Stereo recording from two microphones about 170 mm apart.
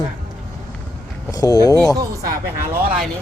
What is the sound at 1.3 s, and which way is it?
Speech, 20° left (ahead or behind).